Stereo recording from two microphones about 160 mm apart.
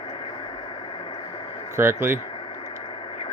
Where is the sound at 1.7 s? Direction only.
15° right (ahead or behind).